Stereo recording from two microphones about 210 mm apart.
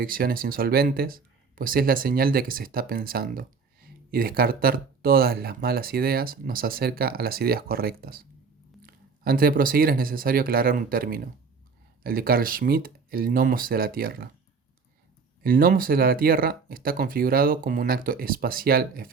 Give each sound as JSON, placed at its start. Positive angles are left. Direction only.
{"t": 0.0, "sound": "speech", "side_deg": -45}
{"t": 15.4, "sound": "speech", "side_deg": -40}